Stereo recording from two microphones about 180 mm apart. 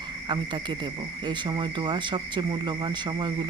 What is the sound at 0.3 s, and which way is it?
Speech, 25° right (ahead or behind).